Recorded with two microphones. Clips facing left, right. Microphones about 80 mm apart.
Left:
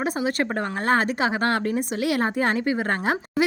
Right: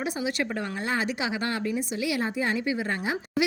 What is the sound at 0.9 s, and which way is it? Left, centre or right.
A woman's voice, left.